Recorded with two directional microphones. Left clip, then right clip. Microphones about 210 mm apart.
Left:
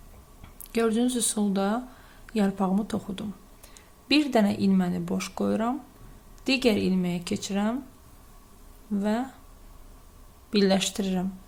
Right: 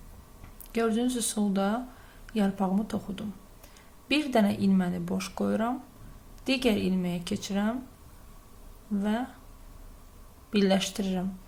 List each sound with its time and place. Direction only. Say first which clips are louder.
0.7 s speech: left 3 dB; 15° left (ahead or behind)
9.0 s speech: left 3 dB; 15° left (ahead or behind)
10.5 s speech: left 2 dB; 15° left (ahead or behind)